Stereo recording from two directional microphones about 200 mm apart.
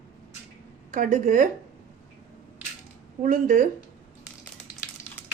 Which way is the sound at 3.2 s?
40° right (ahead or behind).